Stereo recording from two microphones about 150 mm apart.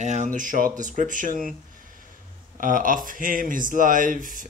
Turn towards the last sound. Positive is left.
turn(degrees=-65)  # may be behind; listen again after turning